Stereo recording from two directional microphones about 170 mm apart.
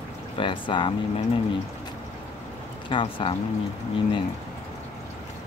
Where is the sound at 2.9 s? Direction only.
30° left (ahead or behind).